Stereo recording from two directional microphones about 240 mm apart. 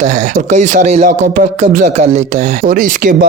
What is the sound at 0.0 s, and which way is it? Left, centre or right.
Speech, right.